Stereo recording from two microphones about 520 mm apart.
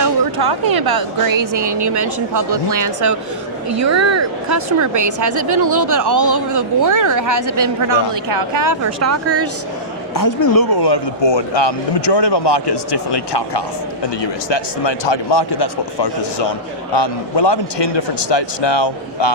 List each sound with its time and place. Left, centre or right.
0.8 s a woman's voice: right
10.2 s speech: left